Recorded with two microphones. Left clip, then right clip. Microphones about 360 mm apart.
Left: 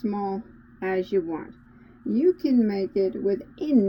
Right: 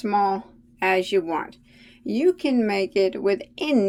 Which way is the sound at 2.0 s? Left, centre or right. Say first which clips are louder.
Right 1 dB; right.